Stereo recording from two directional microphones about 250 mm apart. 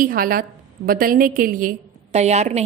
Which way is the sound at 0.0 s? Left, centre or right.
Right.